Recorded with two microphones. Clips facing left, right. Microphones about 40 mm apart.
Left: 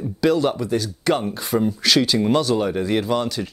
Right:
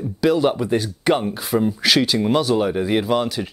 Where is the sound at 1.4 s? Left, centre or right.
Centre.